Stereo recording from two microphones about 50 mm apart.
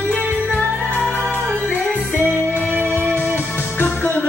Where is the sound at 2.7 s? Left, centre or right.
Right.